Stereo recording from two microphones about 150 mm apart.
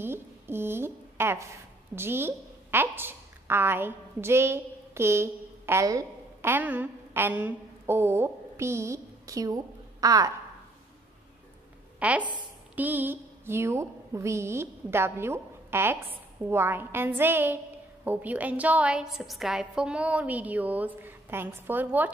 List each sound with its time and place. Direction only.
0.0 s a woman's voice: 15° right (ahead or behind)
12.0 s a woman's voice: 10° right (ahead or behind)